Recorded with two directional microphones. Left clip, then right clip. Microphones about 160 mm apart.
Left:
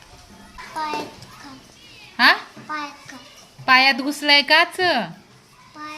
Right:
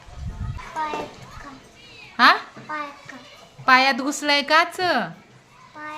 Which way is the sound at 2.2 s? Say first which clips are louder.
Even; 10° right (ahead or behind).